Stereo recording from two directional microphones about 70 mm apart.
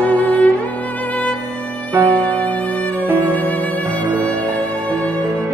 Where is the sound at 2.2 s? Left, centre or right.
Left.